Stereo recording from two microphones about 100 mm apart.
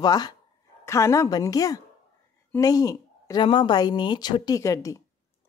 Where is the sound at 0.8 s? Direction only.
30° left (ahead or behind).